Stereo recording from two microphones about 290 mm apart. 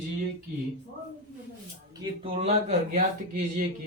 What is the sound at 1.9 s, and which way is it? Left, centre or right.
Speech, centre.